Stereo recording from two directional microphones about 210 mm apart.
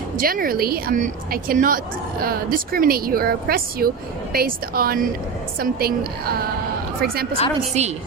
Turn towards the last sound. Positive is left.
turn(degrees=-30)  # may be behind; listen again after turning